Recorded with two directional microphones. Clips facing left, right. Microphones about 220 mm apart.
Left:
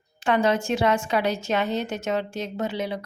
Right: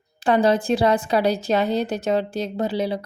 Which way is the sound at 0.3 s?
35° right (ahead or behind).